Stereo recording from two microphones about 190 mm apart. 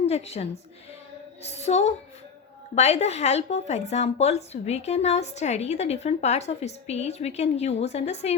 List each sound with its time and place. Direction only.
0.0 s a woman's voice: 35° left (ahead or behind)